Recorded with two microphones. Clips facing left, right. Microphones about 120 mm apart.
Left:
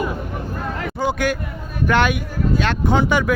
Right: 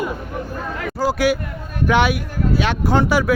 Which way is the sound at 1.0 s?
5° right (ahead or behind).